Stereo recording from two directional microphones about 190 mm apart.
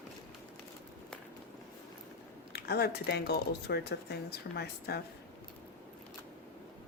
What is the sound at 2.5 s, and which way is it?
Speech, 60° left (ahead or behind).